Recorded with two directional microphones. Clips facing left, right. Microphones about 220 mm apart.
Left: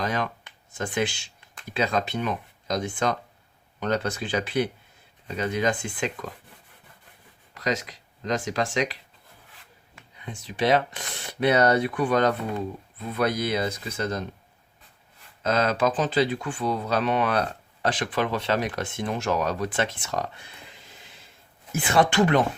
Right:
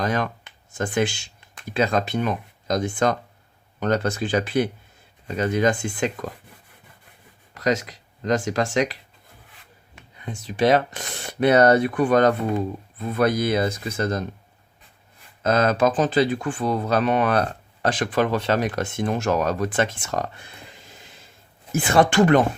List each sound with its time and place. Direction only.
0.0 s speech: 45° right (ahead or behind)
7.5 s speech: 45° right (ahead or behind)
10.2 s speech: 45° right (ahead or behind)
15.4 s speech: 50° right (ahead or behind)
21.7 s speech: 45° right (ahead or behind)